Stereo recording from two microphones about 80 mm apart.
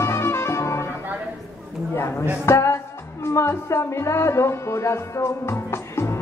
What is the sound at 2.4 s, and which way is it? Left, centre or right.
Speech, left.